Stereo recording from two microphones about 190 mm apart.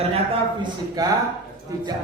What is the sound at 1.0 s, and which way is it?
Singing, 20° right (ahead or behind).